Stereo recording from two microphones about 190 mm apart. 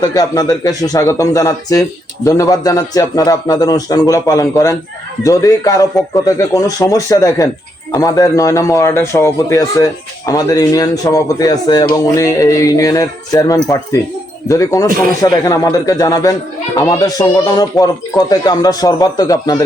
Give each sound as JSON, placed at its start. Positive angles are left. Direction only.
{"t": 0.0, "sound": "a man's voice", "side_deg": 20}